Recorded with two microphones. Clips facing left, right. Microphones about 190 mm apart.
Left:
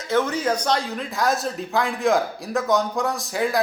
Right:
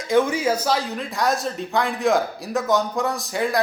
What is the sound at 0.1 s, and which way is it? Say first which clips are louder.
A woman's voice: right 2 dB; 10° right (ahead or behind).